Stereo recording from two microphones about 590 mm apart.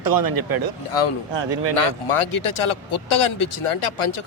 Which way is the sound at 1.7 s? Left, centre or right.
Left.